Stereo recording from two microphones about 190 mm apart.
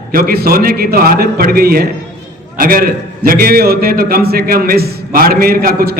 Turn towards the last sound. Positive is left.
turn(degrees=-50)  # may be behind; listen again after turning